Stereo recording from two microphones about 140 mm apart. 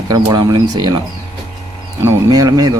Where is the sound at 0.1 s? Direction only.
25° right (ahead or behind).